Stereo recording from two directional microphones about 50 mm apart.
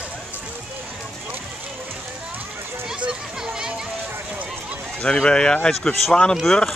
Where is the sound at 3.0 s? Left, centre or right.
Centre.